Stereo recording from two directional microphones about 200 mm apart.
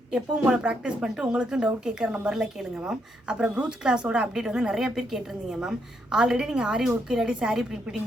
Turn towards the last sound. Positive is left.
turn(degrees=0)  # may be behind; listen again after turning